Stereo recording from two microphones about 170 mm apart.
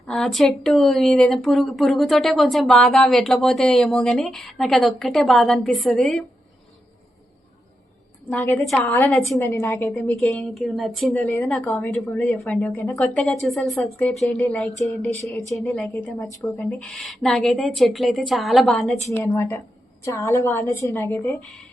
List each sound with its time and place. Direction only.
0.0 s speech: centre (ahead or behind)
8.3 s speech: 10° left (ahead or behind)
9.4 s a woman's voice: 15° left (ahead or behind)
15.5 s speech: centre (ahead or behind)
19.1 s a woman's voice: 15° left (ahead or behind)